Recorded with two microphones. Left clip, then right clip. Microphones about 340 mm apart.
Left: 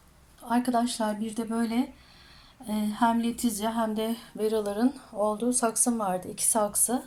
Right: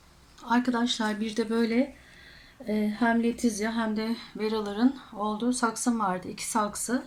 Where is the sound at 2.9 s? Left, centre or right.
Centre.